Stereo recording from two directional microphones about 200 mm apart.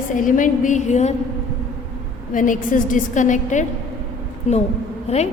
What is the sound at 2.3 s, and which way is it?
A woman's voice, 40° left (ahead or behind).